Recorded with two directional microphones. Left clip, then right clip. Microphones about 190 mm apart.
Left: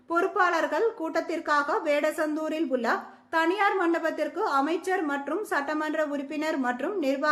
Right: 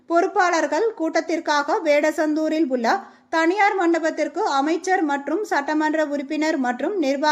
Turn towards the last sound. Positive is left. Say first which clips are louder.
# right 6 dB
turn(degrees=-15)  # may be behind; listen again after turning